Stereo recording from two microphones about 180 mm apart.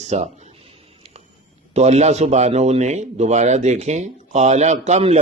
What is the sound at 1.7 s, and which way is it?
A man's voice, 40° right (ahead or behind).